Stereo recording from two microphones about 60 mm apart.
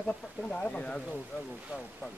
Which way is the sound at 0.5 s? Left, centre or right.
Left.